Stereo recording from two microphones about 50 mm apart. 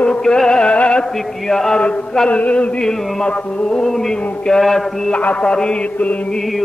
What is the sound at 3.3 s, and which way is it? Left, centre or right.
Music, left.